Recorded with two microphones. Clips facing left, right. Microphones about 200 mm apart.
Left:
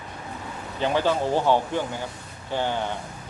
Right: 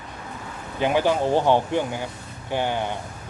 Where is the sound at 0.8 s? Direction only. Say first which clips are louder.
Right 2 dB; 15° right (ahead or behind).